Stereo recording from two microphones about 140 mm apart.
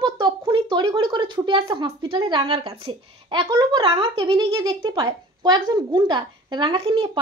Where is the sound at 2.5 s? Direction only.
40° right (ahead or behind).